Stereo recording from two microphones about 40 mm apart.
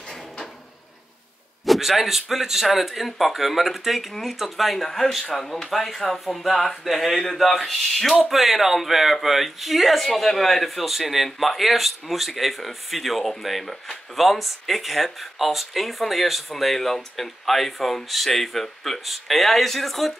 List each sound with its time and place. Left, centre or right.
1.7 s speech: centre